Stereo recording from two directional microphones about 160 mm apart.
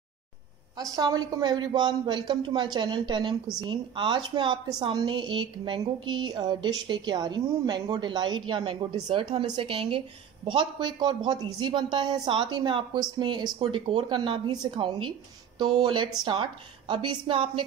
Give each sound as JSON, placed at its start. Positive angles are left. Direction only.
{"t": 0.7, "sound": "a woman's voice", "side_deg": -25}